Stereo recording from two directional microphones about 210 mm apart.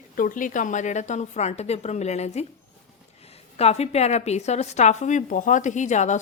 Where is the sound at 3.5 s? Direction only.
30° left (ahead or behind).